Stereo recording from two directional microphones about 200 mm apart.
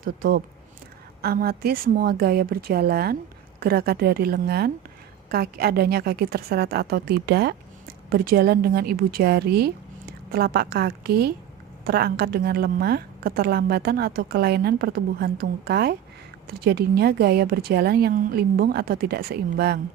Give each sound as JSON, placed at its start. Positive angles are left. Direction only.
{"t": 0.0, "sound": "a woman's voice", "side_deg": -45}